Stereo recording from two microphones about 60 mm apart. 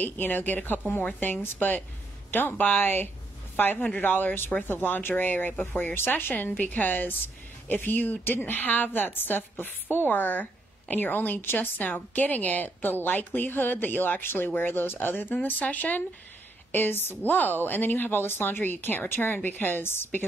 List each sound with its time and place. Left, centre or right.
0.0 s a woman's voice: left
16.7 s a woman's voice: left